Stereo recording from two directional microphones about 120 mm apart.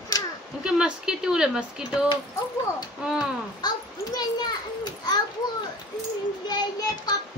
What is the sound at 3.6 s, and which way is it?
Children playing, 35° left (ahead or behind).